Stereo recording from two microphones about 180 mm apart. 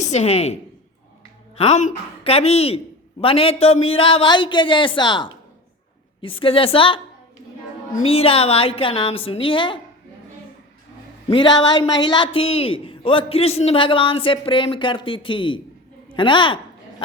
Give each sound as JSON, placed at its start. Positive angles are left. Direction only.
{"t": 0.0, "sound": "a woman's voice", "side_deg": 40}
{"t": 11.3, "sound": "speech", "side_deg": 25}